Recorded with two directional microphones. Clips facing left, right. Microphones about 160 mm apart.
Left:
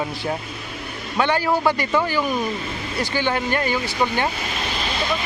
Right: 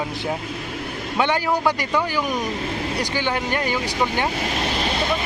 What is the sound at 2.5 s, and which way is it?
Vehicle, 85° right.